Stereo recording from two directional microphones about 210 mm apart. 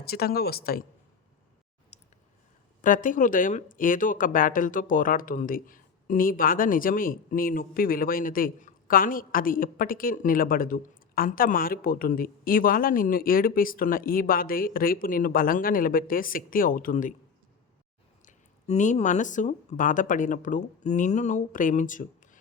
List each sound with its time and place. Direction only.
0.0 s speech: 45° left (ahead or behind)
1.9 s a sound: 30° left (ahead or behind)
2.8 s a woman's voice: 40° left (ahead or behind)
18.3 s a woman's voice: 35° left (ahead or behind)